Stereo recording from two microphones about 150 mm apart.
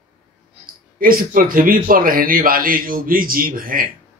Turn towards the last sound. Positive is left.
turn(degrees=-70)  # may be behind; listen again after turning